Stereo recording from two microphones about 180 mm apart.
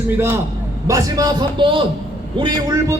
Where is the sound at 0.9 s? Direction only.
20° right (ahead or behind).